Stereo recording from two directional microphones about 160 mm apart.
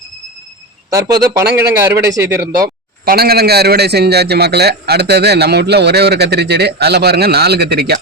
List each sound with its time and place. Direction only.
0.9 s speech: 20° right (ahead or behind)
3.1 s a man's voice: 75° right (ahead or behind)